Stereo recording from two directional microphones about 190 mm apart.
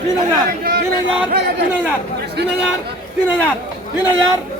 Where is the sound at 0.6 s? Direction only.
50° right (ahead or behind).